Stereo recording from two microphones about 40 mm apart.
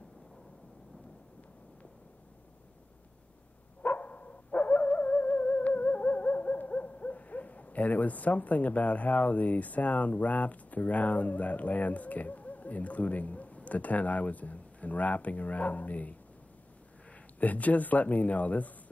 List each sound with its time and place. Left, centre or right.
3.8 s music: left
17.4 s speech: left